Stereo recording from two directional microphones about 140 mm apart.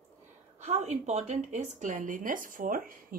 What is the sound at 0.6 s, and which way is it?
A woman's voice, 55° right (ahead or behind).